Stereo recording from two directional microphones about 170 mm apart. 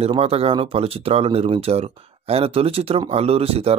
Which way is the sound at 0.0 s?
35° right (ahead or behind).